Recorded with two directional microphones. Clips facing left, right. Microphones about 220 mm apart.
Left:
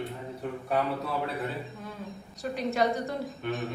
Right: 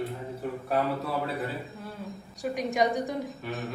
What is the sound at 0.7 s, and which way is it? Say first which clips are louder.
Speech: right 1 dB; centre (ahead or behind).